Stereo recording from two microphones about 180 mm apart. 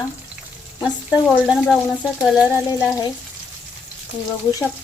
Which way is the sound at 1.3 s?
5° right (ahead or behind).